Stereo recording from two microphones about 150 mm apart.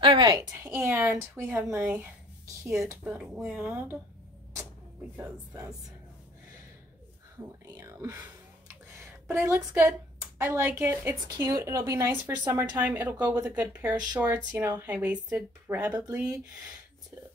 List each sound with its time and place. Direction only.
0.0 s speech: 30° right (ahead or behind); by 4.0 s 10° right (ahead or behind)
5.1 s speech: 15° right (ahead or behind)
7.3 s speech: 20° right (ahead or behind)
9.3 s speech: 15° right (ahead or behind)